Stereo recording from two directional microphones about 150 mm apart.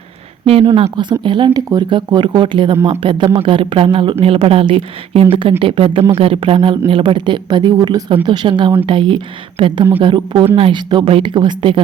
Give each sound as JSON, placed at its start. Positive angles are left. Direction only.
{"t": 0.4, "sound": "speech", "side_deg": -40}